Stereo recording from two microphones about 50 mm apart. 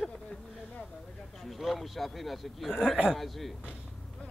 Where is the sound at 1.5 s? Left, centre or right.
Centre.